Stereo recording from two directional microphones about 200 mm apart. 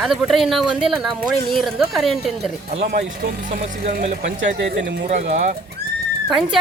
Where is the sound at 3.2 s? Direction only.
50° right (ahead or behind).